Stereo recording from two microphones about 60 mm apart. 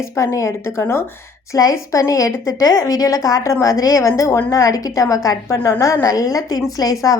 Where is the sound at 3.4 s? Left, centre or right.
Left.